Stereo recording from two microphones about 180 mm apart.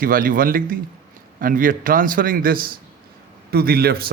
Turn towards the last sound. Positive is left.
turn(degrees=-60)  # may be behind; listen again after turning